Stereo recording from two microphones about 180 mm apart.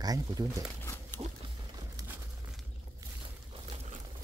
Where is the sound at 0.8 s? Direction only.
10° left (ahead or behind).